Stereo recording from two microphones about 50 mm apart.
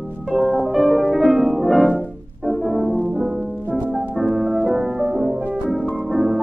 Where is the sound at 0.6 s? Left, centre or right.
Centre.